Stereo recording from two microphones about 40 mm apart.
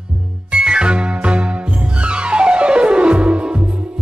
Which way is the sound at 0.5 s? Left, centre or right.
Right.